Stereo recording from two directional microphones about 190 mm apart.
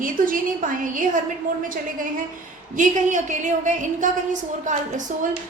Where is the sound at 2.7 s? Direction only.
40° right (ahead or behind).